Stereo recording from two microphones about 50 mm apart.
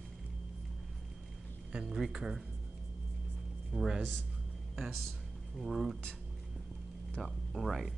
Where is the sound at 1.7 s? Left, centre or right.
Centre.